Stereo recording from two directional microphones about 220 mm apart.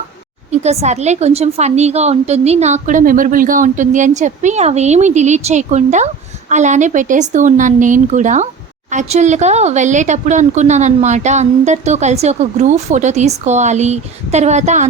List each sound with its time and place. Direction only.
0.5 s speech: 30° right (ahead or behind)